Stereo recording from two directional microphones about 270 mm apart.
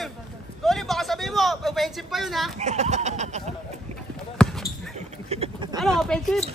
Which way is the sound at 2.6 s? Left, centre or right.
Right.